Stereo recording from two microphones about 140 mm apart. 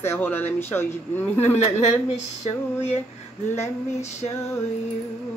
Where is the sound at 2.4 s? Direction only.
50° left (ahead or behind).